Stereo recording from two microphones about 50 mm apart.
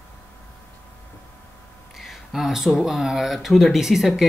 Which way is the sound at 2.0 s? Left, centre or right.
Centre.